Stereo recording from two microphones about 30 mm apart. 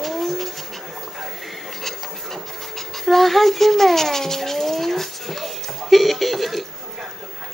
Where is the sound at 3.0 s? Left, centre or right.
Centre.